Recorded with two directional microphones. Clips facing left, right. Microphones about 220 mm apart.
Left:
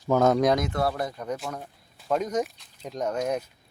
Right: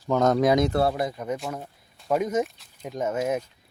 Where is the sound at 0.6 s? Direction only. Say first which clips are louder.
Right 4 dB; 30° right (ahead or behind).